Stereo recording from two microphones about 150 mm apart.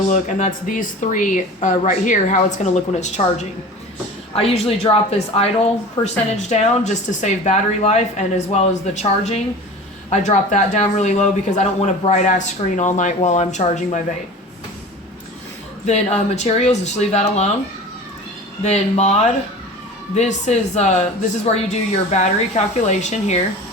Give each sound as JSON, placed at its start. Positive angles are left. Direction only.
{"t": 0.1, "sound": "a woman's voice", "side_deg": 55}
{"t": 6.0, "sound": "a woman's voice", "side_deg": 30}
{"t": 6.5, "sound": "speech", "side_deg": 50}
{"t": 15.9, "sound": "speech", "side_deg": 50}
{"t": 18.6, "sound": "speech", "side_deg": 50}